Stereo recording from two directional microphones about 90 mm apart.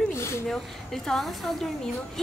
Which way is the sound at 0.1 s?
30° left (ahead or behind).